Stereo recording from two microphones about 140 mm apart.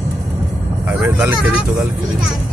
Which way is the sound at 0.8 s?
10° right (ahead or behind).